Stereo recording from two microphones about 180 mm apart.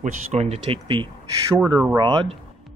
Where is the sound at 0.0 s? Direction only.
40° right (ahead or behind).